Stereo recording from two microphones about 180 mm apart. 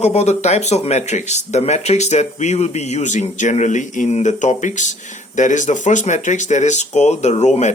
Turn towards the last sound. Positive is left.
turn(degrees=40)  # may be behind; listen again after turning